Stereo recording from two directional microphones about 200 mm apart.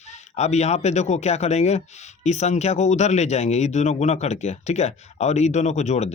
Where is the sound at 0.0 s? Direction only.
35° left (ahead or behind).